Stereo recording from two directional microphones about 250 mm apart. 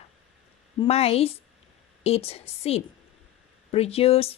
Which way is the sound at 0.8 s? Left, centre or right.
Left.